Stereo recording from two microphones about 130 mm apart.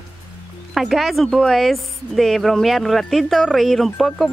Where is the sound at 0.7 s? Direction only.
Centre (ahead or behind).